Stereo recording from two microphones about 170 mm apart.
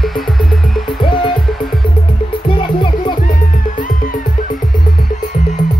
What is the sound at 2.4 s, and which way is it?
Music, 30° left (ahead or behind).